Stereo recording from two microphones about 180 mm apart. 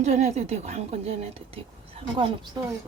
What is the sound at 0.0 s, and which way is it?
A woman's voice, 40° right (ahead or behind).